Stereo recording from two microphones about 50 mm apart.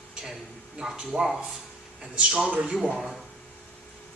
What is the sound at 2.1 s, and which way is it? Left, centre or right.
Speech, right.